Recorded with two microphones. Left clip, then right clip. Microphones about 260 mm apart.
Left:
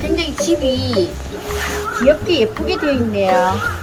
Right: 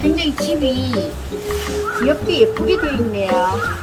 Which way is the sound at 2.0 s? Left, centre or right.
Left.